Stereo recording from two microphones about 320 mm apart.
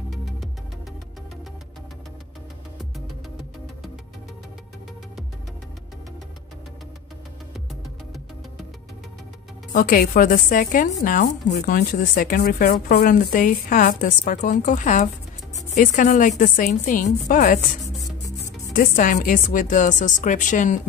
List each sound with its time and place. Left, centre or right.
0.1 s music: centre
9.7 s a woman's voice: left